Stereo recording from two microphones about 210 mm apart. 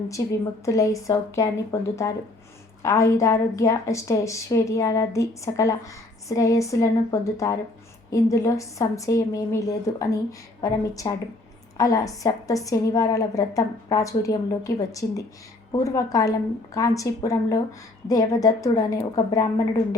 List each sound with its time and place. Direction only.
0.1 s a woman's voice: 15° left (ahead or behind)